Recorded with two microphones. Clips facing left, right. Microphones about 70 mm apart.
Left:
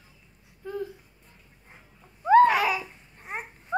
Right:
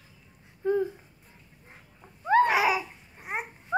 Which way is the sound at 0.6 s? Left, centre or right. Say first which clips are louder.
Right 8 dB; right.